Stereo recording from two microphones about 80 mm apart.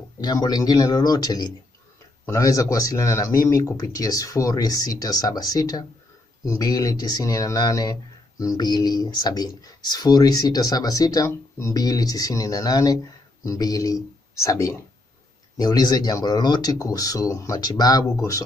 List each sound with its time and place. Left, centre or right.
0.2 s speech: left
2.2 s speech: left
8.6 s speech: left
11.2 s speech: left
11.7 s speech: left
15.5 s speech: left